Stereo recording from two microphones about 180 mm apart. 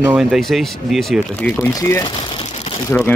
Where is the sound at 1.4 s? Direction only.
15° left (ahead or behind).